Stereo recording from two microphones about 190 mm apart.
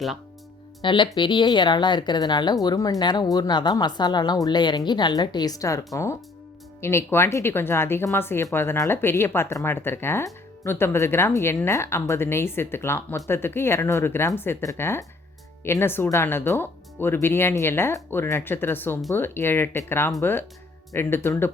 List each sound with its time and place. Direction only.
0.8 s speech: 25° left (ahead or behind)